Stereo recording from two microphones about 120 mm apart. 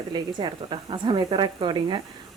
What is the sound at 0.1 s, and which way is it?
A man's voice, 40° right (ahead or behind).